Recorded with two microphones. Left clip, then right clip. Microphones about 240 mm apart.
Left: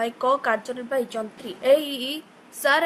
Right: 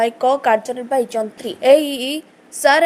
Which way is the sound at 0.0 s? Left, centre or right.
Centre.